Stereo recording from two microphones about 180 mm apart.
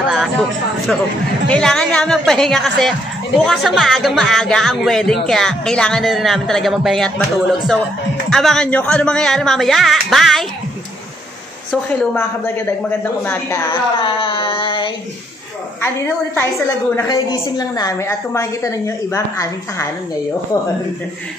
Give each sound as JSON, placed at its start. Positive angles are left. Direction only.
{"t": 0.1, "sound": "a sound", "side_deg": 0}
{"t": 1.5, "sound": "speech", "side_deg": 5}
{"t": 8.3, "sound": "speech", "side_deg": 0}
{"t": 11.7, "sound": "a woman's voice", "side_deg": 5}
{"t": 13.7, "sound": "a sound", "side_deg": 30}
{"t": 16.3, "sound": "a woman's voice", "side_deg": 15}